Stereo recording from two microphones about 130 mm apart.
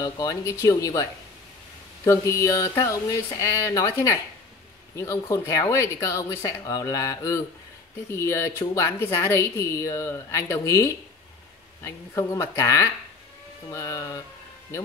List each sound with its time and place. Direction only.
0.0 s speech: 30° left (ahead or behind)
2.0 s speech: 25° left (ahead or behind)